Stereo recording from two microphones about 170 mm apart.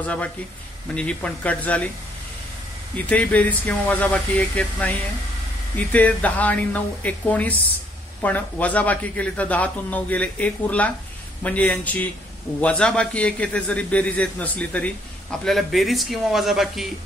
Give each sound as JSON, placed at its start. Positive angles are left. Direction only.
{"t": 0.0, "sound": "speech", "side_deg": 10}
{"t": 3.1, "sound": "speech", "side_deg": 10}